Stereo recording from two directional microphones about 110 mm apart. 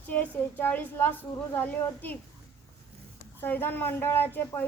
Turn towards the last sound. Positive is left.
turn(degrees=20)  # may be behind; listen again after turning